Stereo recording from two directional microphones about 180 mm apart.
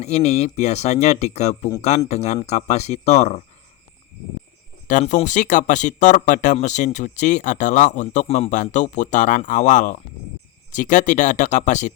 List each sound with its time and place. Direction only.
0.0 s speech: 40° left (ahead or behind)
4.9 s speech: 45° left (ahead or behind)